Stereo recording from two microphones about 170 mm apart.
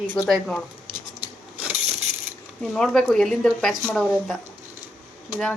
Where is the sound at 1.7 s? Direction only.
40° right (ahead or behind).